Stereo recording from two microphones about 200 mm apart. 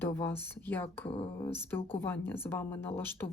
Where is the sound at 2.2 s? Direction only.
10° left (ahead or behind).